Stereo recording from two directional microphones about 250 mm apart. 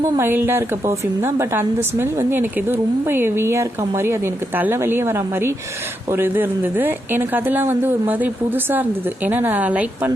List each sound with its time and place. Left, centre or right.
0.2 s a woman's voice: centre